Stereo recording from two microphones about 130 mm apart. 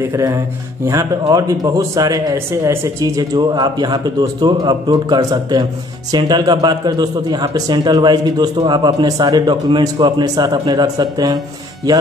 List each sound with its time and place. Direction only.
0.1 s speech: 25° right (ahead or behind)